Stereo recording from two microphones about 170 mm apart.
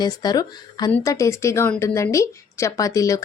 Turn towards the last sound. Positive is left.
turn(degrees=20)  # may be behind; listen again after turning